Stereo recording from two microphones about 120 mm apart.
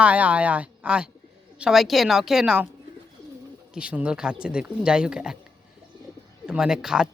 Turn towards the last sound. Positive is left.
turn(degrees=-5)  # may be behind; listen again after turning